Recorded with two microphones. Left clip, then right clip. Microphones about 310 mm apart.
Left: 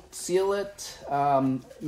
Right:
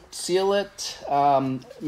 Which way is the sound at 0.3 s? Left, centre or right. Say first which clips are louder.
Right 3 dB; right.